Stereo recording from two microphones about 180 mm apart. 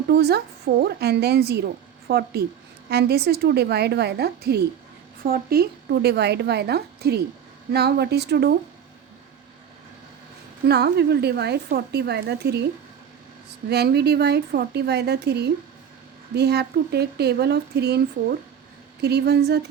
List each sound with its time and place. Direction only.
0.1 s a woman's voice: 65° right (ahead or behind)
10.7 s a woman's voice: 65° right (ahead or behind)
13.7 s a woman's voice: 65° right (ahead or behind)